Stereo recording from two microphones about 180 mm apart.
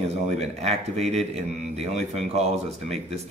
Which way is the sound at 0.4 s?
35° right (ahead or behind).